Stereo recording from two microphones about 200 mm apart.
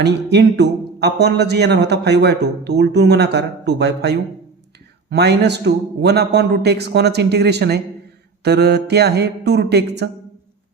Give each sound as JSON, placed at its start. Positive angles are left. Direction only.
{"t": 0.0, "sound": "speech", "side_deg": -55}